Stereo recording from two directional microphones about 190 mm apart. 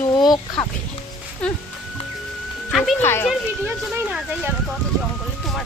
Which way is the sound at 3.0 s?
15° left (ahead or behind).